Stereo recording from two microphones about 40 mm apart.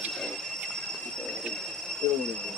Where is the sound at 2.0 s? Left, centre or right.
Left.